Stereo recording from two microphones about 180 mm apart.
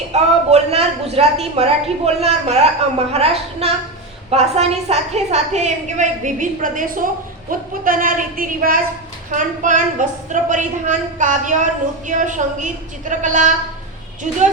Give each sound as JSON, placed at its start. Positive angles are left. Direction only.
{"t": 0.1, "sound": "a woman's voice", "side_deg": -35}